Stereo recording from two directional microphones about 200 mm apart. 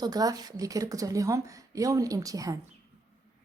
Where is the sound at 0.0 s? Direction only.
20° right (ahead or behind).